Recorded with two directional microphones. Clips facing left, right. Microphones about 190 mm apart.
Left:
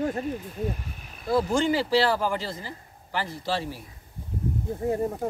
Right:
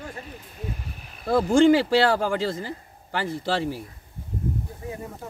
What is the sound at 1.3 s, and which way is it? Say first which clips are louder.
Speech: right 6 dB; 60° right (ahead or behind).